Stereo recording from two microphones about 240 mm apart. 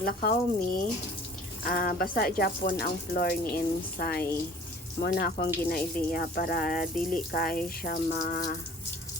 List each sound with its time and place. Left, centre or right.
0.0 s speech: left